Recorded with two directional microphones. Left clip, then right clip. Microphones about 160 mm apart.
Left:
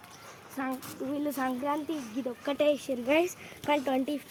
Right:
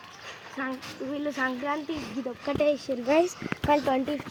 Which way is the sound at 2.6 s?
35° right (ahead or behind).